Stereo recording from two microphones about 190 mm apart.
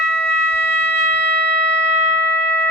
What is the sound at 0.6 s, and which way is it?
Siren, 75° left (ahead or behind).